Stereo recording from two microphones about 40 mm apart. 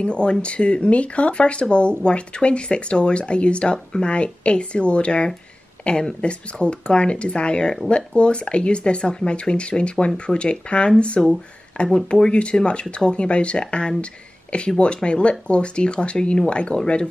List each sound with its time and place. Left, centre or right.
0.0 s speech: left